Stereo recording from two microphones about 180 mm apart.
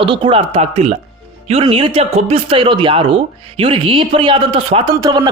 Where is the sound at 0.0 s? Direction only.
30° right (ahead or behind).